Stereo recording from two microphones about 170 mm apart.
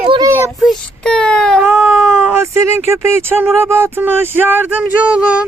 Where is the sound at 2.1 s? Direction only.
15° right (ahead or behind).